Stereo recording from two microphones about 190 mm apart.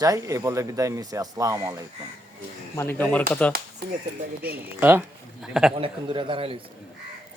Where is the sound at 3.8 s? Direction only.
60° right (ahead or behind).